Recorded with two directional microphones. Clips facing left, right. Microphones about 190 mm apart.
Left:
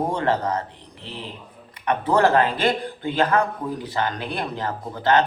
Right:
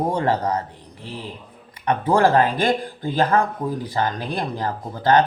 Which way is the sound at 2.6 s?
40° right (ahead or behind).